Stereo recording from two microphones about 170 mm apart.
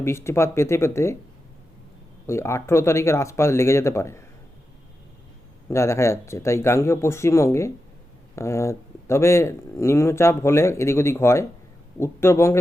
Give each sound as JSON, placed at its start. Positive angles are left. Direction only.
{"t": 0.0, "sound": "speech", "side_deg": 15}
{"t": 2.2, "sound": "speech", "side_deg": 15}
{"t": 5.6, "sound": "speech", "side_deg": 15}